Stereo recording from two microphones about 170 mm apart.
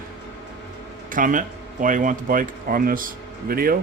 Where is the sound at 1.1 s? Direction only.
50° right (ahead or behind).